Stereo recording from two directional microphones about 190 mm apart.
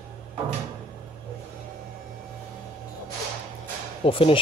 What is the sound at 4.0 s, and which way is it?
Speech, 30° left (ahead or behind).